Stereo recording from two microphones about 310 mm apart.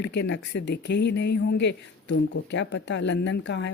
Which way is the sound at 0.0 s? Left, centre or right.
Left.